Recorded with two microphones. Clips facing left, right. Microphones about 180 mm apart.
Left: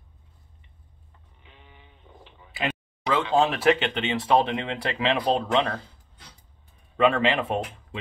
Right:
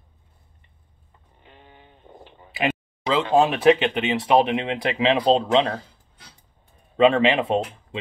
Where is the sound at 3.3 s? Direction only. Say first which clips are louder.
Right 5 dB; 15° right (ahead or behind).